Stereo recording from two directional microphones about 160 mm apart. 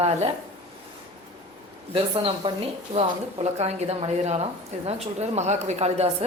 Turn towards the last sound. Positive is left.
turn(degrees=-40)  # may be behind; listen again after turning